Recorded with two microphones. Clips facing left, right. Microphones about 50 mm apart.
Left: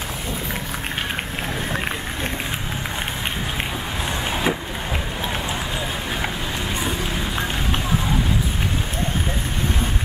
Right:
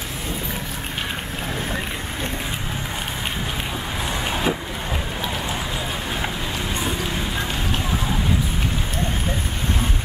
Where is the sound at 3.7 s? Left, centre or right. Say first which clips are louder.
Even; centre.